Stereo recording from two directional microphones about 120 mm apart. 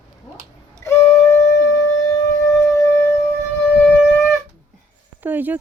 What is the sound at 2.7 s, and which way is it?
Shofar, 25° left (ahead or behind).